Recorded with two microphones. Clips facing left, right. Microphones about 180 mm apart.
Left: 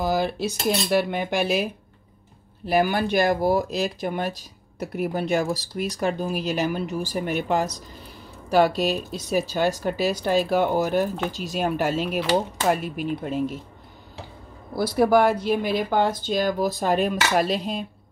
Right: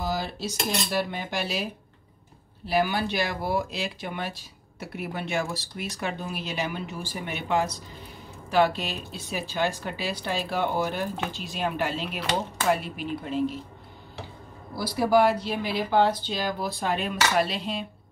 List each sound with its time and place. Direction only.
0.0 s cutlery: 55° left (ahead or behind)
2.6 s speech: 50° left (ahead or behind)
14.8 s speech: 50° left (ahead or behind)